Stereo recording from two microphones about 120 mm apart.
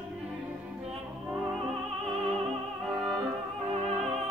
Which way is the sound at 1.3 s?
Centre (ahead or behind).